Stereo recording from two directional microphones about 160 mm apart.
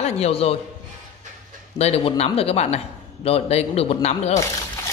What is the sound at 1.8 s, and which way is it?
Speech, 40° left (ahead or behind).